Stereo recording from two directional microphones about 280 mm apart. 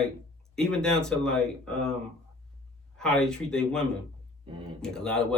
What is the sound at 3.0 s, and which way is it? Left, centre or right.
Speech, centre.